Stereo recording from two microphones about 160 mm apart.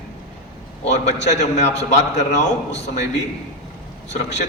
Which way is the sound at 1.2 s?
45° left (ahead or behind).